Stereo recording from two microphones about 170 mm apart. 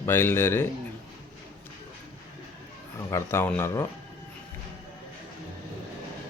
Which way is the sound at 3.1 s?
15° left (ahead or behind).